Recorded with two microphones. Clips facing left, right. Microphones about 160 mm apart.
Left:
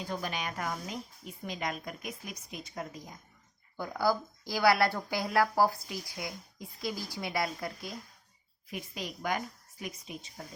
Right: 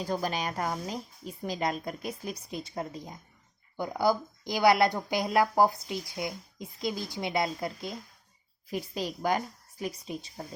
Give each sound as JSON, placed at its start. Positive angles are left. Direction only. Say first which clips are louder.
{"t": 0.0, "sound": "a woman's voice", "louder": "right 5 dB", "side_deg": -35}